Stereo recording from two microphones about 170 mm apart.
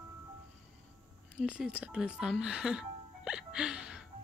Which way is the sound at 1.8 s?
5° right (ahead or behind).